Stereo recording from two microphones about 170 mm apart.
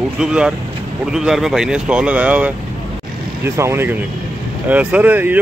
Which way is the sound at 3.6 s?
15° right (ahead or behind).